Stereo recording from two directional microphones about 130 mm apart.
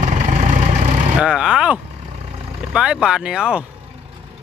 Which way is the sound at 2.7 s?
5° right (ahead or behind).